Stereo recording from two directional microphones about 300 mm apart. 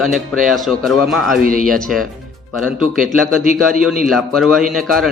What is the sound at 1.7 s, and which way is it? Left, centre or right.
Speech, centre.